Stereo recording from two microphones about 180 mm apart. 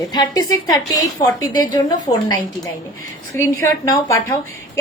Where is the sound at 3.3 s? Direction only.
15° left (ahead or behind).